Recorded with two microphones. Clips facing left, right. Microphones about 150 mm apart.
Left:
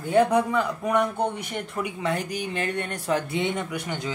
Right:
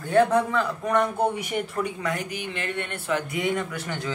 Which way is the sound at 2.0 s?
30° left (ahead or behind).